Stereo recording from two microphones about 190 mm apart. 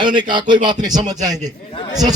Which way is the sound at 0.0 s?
25° right (ahead or behind).